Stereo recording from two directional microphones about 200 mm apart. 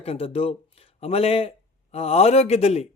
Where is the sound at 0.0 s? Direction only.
30° left (ahead or behind).